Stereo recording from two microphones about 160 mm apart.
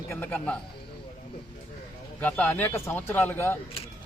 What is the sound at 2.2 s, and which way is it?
Speech, 10° left (ahead or behind).